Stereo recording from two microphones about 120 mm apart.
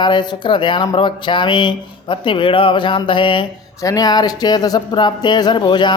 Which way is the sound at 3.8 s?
35° left (ahead or behind).